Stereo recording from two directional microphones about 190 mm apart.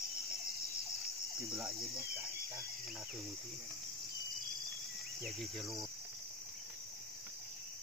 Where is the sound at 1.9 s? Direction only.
15° right (ahead or behind).